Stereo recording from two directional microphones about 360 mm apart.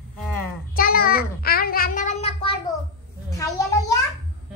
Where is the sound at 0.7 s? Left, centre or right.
Left.